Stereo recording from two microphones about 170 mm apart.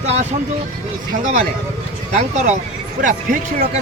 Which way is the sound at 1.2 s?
45° right (ahead or behind).